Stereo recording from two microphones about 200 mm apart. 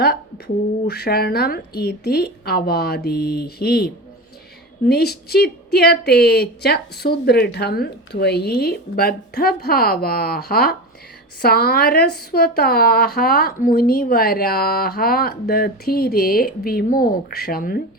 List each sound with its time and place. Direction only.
0.0 s speech: 50° left (ahead or behind)
4.9 s speech: 50° left (ahead or behind)